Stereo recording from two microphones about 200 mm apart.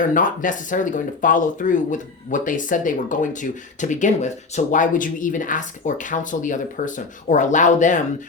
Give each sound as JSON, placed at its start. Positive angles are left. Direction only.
{"t": 0.0, "sound": "speech", "side_deg": 40}